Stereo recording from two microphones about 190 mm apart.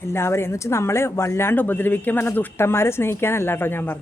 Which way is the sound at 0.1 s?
15° left (ahead or behind).